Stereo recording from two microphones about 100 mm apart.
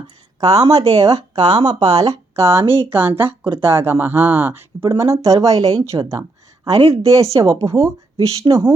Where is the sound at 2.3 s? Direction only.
25° right (ahead or behind).